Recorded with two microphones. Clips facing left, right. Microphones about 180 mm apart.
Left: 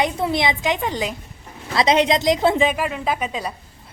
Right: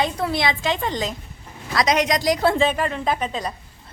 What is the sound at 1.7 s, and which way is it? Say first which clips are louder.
A woman's voice: left 3 dB; 25° left (ahead or behind).